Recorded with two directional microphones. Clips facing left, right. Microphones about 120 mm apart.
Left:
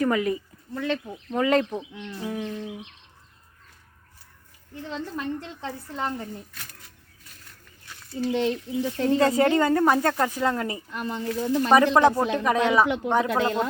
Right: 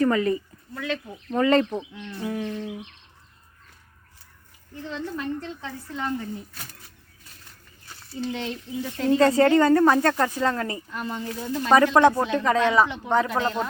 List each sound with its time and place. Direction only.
0.0 s speech: 10° left (ahead or behind)
0.7 s speech: 30° left (ahead or behind)
1.3 s a sound: 5° left (ahead or behind)
5.6 s speech: 35° left (ahead or behind)
8.1 s speech: 35° left (ahead or behind)
8.8 s speech: 15° left (ahead or behind)
11.0 s speech: 10° right (ahead or behind)
11.7 s speech: 15° left (ahead or behind)